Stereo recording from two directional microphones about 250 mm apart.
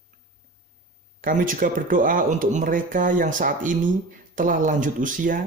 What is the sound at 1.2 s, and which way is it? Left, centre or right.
Speech, right.